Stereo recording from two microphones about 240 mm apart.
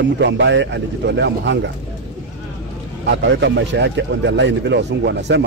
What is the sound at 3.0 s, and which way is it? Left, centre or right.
Speech, right.